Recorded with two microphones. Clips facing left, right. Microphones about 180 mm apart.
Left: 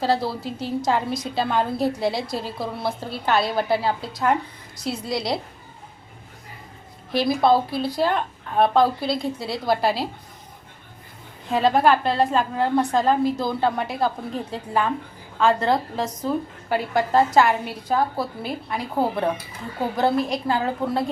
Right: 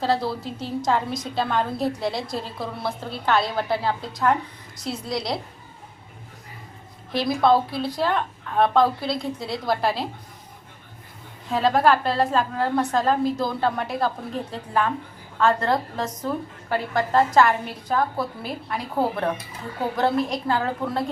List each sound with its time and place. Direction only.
0.0 s a woman's voice: centre (ahead or behind)
7.1 s a woman's voice: 5° left (ahead or behind)
11.5 s a woman's voice: centre (ahead or behind)